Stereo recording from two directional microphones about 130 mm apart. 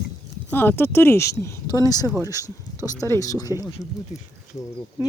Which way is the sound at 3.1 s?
25° left (ahead or behind).